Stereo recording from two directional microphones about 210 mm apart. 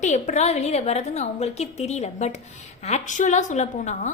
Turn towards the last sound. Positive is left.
turn(degrees=35)  # may be behind; listen again after turning